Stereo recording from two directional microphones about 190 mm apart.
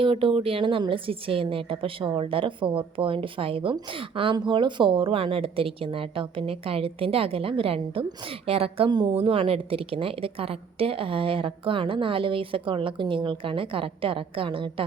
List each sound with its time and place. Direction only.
0.0 s a woman's voice: 30° right (ahead or behind)